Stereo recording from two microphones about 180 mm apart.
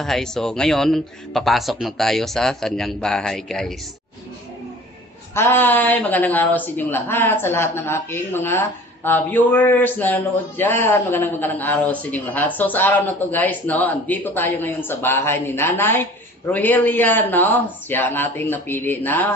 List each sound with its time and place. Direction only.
0.0 s speech: 5° left (ahead or behind)
5.3 s speech: 10° left (ahead or behind)